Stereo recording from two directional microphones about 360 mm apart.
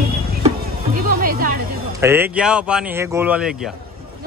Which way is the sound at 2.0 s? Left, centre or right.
Centre.